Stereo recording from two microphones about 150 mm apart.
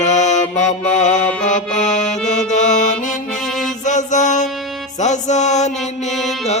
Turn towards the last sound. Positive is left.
turn(degrees=0)  # may be behind; listen again after turning